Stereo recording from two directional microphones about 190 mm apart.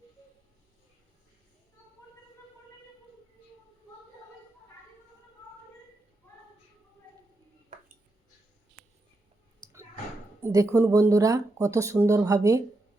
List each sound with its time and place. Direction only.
9.6 s clicking: 20° right (ahead or behind)
10.4 s speech: 15° right (ahead or behind)